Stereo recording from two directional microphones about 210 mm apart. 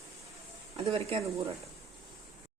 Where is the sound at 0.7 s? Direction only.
25° right (ahead or behind).